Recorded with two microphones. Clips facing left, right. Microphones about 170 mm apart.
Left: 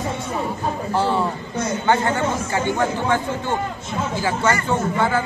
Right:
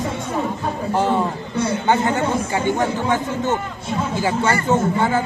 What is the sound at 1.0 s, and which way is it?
Speech, 15° right (ahead or behind).